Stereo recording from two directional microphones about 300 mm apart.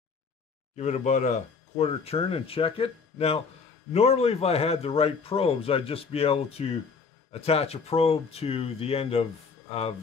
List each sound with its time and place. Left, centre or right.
0.7 s a man's voice: left